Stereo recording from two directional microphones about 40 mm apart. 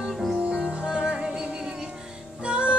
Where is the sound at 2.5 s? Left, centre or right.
Right.